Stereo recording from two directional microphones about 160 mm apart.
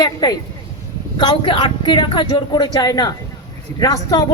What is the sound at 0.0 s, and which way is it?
A man's voice, 25° left (ahead or behind).